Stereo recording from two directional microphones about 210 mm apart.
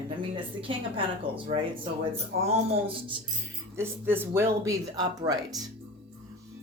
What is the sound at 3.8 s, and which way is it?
Speech, 10° right (ahead or behind).